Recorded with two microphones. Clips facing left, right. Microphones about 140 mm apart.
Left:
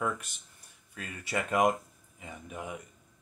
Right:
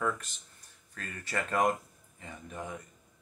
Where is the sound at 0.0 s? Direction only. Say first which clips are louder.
Even; 10° left (ahead or behind).